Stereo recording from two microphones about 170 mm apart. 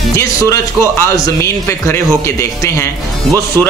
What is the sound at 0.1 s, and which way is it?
A man's voice, 15° left (ahead or behind).